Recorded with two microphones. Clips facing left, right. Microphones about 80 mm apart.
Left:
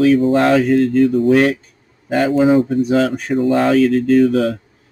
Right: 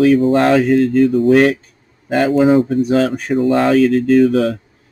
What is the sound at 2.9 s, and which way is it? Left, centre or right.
Speech, right.